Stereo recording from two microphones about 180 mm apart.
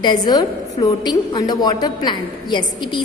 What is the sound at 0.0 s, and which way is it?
A woman's voice, 25° left (ahead or behind).